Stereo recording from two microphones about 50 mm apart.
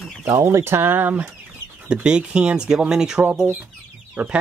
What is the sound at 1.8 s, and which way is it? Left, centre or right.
Speech, right.